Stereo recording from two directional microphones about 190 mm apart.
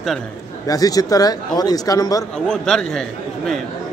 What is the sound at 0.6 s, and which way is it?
Speech, 20° left (ahead or behind).